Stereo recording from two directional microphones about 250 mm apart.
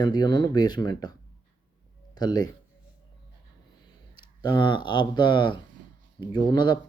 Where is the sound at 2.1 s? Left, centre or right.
Centre.